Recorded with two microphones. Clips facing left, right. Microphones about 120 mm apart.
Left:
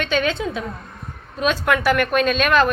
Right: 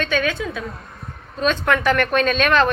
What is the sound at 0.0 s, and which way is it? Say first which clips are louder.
Speech: left 1 dB; 20° left (ahead or behind).